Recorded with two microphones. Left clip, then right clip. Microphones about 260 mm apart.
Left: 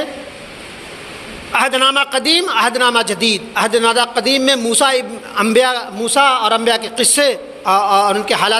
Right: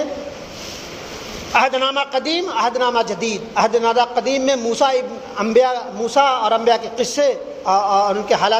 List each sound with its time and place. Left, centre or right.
1.5 s a man's voice: left